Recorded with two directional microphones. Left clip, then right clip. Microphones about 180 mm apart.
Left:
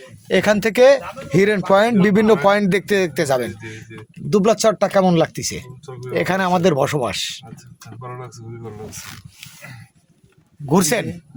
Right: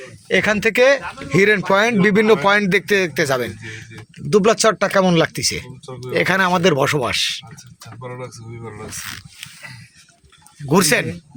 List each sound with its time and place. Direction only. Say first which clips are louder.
0.0 s speech: even; 25° left (ahead or behind)
9.0 s speech: right 6 dB; 10° left (ahead or behind)
10.7 s speech: right 2 dB; 10° left (ahead or behind)